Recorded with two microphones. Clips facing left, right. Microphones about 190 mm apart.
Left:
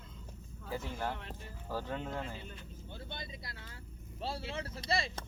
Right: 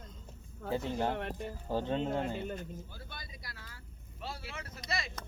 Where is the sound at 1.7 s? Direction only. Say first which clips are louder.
Right 6 dB; 25° right (ahead or behind).